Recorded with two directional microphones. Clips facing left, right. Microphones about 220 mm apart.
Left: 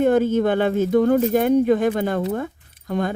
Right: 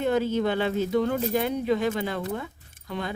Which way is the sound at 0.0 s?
50° left (ahead or behind).